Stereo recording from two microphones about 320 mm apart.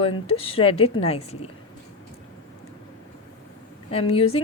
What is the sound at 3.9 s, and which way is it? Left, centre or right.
Speech, centre.